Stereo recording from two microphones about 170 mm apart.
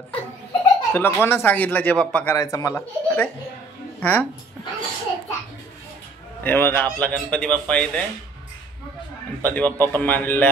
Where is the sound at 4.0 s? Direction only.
10° left (ahead or behind).